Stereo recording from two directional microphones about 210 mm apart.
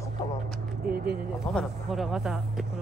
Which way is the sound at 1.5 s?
Centre (ahead or behind).